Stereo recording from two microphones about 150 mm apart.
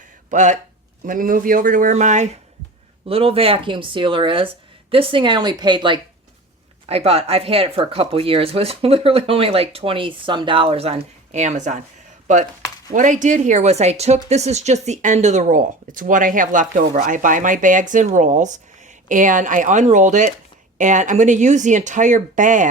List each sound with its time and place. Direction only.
0.3 s speech: 55° right (ahead or behind)
1.0 s speech: 65° right (ahead or behind)
3.1 s speech: 40° right (ahead or behind)
6.8 s speech: 40° right (ahead or behind)
12.9 s speech: 60° right (ahead or behind)